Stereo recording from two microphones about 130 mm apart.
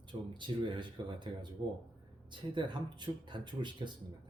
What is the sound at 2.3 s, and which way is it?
Speech, 35° right (ahead or behind).